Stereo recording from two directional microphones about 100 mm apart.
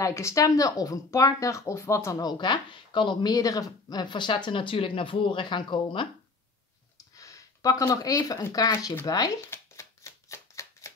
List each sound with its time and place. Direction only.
0.0 s speech: 30° left (ahead or behind); by 6.0 s 55° left (ahead or behind)
7.2 s speech: 35° left (ahead or behind)
9.5 s shuffling cards: 30° left (ahead or behind)